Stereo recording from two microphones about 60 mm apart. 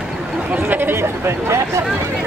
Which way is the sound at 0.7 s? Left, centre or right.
Right.